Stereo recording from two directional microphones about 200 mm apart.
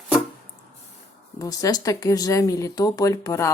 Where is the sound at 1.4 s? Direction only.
15° left (ahead or behind).